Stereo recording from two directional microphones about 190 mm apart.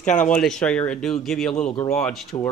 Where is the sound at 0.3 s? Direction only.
5° left (ahead or behind).